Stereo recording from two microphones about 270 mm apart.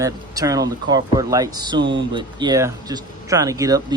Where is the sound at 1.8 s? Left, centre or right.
Right.